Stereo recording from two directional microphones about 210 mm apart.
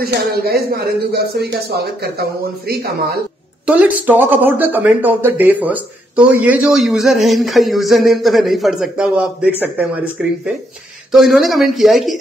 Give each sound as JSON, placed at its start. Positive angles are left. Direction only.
{"t": 0.0, "sound": "speech", "side_deg": -45}
{"t": 3.6, "sound": "speech", "side_deg": -5}